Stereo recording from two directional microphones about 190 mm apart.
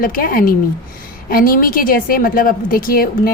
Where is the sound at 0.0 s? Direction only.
50° left (ahead or behind).